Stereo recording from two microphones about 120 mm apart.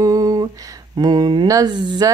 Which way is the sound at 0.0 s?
30° right (ahead or behind).